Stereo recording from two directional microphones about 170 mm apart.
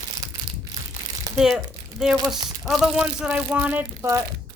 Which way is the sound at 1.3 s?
5° right (ahead or behind).